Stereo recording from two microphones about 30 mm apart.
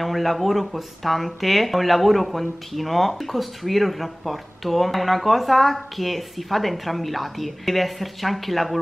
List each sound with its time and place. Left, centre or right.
0.0 s speech: centre